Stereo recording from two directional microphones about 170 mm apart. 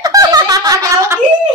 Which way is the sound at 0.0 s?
20° right (ahead or behind).